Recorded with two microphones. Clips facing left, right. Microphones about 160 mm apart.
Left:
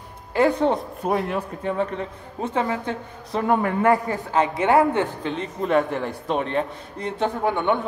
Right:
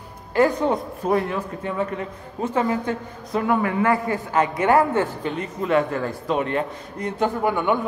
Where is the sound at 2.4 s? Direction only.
30° left (ahead or behind).